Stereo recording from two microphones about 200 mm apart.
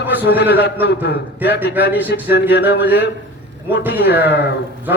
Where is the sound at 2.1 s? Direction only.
55° left (ahead or behind).